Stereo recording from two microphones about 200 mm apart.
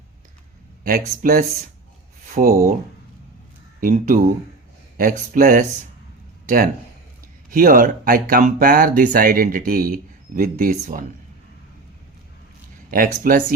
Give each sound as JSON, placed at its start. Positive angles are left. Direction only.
{"t": 0.9, "sound": "speech", "side_deg": -45}
{"t": 3.8, "sound": "speech", "side_deg": -40}
{"t": 6.4, "sound": "a sound", "side_deg": -45}
{"t": 7.5, "sound": "speech", "side_deg": -45}
{"t": 13.2, "sound": "speech", "side_deg": -45}